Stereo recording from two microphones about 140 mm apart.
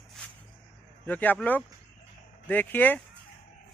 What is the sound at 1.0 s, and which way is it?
Speech, 10° left (ahead or behind).